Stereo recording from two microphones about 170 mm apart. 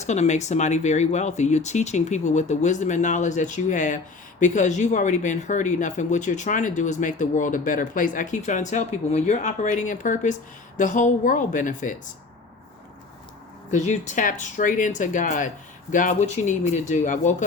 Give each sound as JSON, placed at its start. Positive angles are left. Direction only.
{"t": 0.0, "sound": "speech", "side_deg": 45}
{"t": 13.7, "sound": "speech", "side_deg": 45}